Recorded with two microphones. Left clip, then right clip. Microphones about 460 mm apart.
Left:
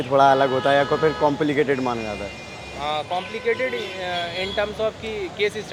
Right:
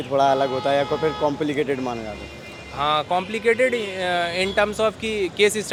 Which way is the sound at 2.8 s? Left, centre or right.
Right.